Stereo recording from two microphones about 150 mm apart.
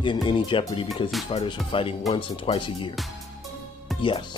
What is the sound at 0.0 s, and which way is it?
Speech, 30° left (ahead or behind).